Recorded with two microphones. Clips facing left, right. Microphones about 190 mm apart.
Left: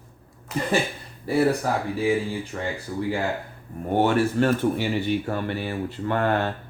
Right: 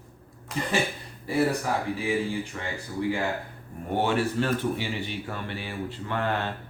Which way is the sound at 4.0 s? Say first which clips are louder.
Left 5 dB; 50° left (ahead or behind).